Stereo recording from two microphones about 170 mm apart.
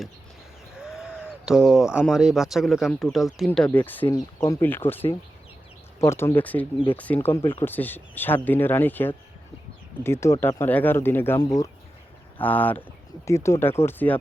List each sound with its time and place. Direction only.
0.7 s a sound: 5° right (ahead or behind)
1.5 s speech: 5° right (ahead or behind); by 5.0 s 10° left (ahead or behind)
6.1 s speech: 15° left (ahead or behind)